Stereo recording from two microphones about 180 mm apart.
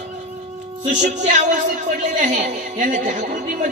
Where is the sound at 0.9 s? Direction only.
40° right (ahead or behind).